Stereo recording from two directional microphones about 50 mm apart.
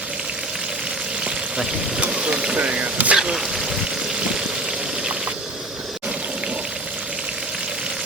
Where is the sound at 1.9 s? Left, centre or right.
Right.